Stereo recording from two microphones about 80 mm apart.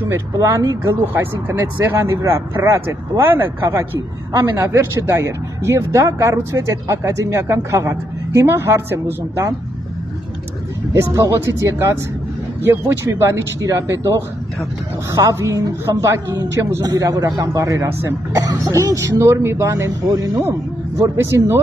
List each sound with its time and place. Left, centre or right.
0.1 s speech: right
10.9 s speech: right
16.8 s speech: right
21.0 s speech: right